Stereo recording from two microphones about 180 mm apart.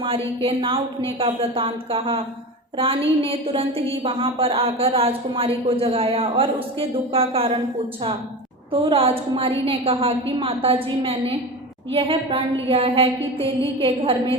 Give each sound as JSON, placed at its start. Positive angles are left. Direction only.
{"t": 0.4, "sound": "speech", "side_deg": -30}
{"t": 8.7, "sound": "speech", "side_deg": -30}